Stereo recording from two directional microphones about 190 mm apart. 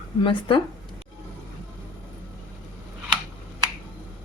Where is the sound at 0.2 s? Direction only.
25° left (ahead or behind).